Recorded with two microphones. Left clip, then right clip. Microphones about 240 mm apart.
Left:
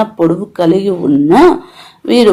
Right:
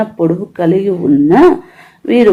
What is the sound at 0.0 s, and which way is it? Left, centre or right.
Speech, left.